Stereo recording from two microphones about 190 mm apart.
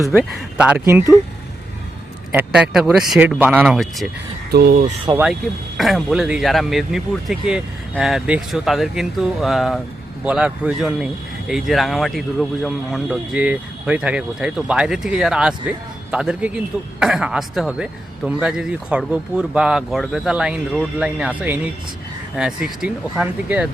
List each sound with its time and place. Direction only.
0.2 s speech: 5° right (ahead or behind)
2.3 s speech: 10° right (ahead or behind)
4.5 s speech: 55° right (ahead or behind)
5.2 s speech: centre (ahead or behind)